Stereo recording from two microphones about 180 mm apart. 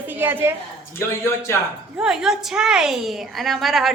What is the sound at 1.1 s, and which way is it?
Speech, 15° left (ahead or behind).